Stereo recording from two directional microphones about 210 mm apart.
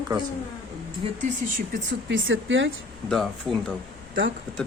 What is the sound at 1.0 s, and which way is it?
Speech, 25° right (ahead or behind).